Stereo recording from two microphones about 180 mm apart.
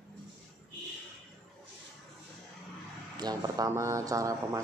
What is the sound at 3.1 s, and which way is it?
Speech, 20° right (ahead or behind).